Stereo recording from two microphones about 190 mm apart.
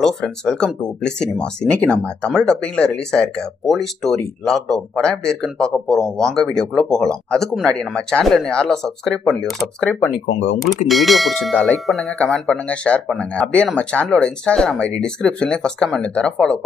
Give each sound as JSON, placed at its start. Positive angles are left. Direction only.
{"t": 0.0, "sound": "speech", "side_deg": 5}